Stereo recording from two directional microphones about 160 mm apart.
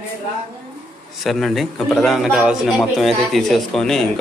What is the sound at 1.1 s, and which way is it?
A man's voice, centre (ahead or behind).